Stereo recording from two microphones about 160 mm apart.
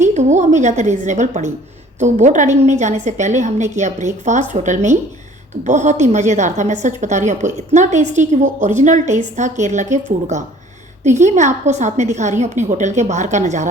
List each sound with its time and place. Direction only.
0.1 s a woman's voice: 45° right (ahead or behind)